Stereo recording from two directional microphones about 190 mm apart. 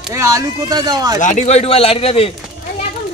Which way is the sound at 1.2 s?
40° left (ahead or behind).